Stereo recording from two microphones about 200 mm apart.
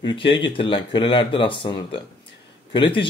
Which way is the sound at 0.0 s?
25° left (ahead or behind).